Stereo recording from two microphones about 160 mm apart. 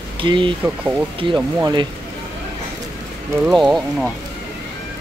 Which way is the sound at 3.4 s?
Centre (ahead or behind).